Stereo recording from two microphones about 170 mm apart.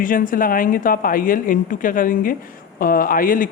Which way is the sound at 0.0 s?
55° left (ahead or behind).